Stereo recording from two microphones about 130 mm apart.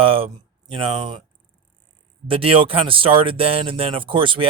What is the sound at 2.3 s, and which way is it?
Speech, 45° right (ahead or behind).